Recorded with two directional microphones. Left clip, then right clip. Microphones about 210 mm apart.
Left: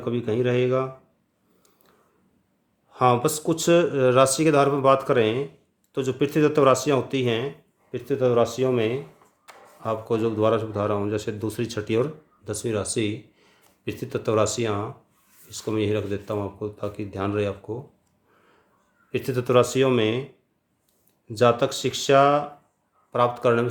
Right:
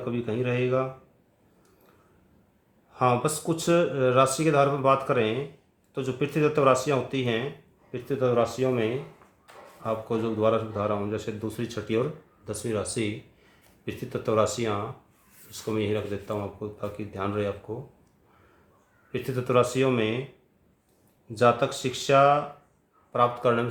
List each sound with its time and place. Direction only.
0.0 s speech: 40° left (ahead or behind)
2.9 s speech: 45° left (ahead or behind)
19.1 s speech: 45° left (ahead or behind)
21.3 s speech: 45° left (ahead or behind)